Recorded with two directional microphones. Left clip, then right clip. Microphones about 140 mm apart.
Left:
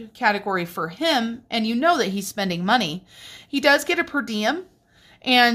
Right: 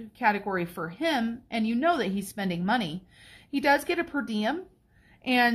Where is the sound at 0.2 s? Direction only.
30° left (ahead or behind).